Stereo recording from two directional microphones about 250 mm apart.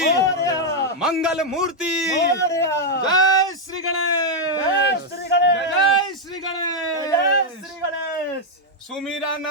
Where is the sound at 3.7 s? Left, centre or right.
Right.